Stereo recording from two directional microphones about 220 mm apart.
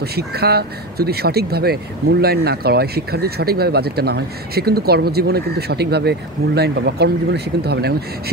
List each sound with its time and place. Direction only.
0.0 s speech: 45° right (ahead or behind)